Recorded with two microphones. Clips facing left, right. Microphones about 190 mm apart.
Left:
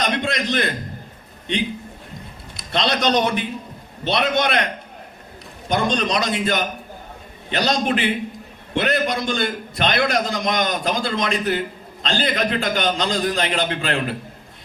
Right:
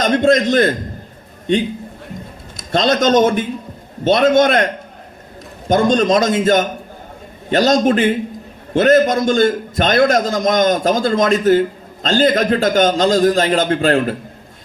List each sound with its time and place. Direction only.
0.0 s a man's voice: 45° right (ahead or behind)
2.6 s a man's voice: 45° right (ahead or behind)